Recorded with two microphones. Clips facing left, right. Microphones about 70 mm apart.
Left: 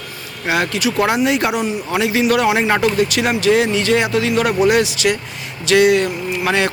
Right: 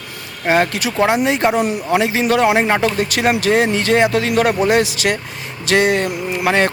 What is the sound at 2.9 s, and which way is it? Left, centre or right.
Speech, right.